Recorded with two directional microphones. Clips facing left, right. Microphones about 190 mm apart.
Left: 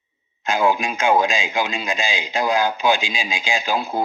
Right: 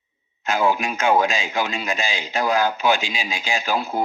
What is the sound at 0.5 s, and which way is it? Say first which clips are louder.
Speech: left 1 dB; 15° left (ahead or behind).